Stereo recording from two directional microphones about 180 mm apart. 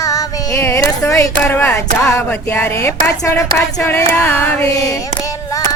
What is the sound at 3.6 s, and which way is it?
Female singing, 10° left (ahead or behind).